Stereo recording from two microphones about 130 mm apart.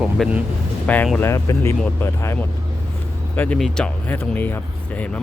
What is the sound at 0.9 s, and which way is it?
Speech, 10° left (ahead or behind).